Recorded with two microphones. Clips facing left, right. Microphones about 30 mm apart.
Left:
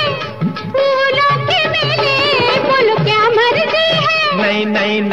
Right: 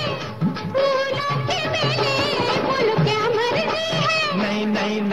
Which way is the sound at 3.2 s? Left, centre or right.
Left.